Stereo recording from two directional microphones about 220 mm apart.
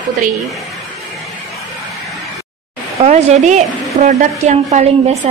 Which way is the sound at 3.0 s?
30° right (ahead or behind).